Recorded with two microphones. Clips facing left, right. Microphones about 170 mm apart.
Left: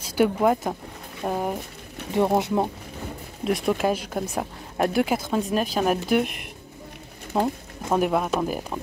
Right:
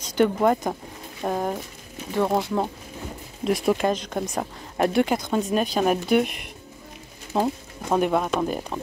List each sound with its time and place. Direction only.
0.0 s speech: 5° left (ahead or behind)
2.1 s speech: 20° left (ahead or behind)
3.4 s speech: centre (ahead or behind)